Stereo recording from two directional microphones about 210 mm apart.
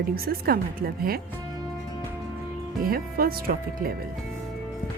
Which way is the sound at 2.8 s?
45° right (ahead or behind).